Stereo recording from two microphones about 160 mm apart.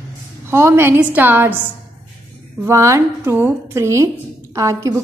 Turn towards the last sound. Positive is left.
turn(degrees=-20)  # may be behind; listen again after turning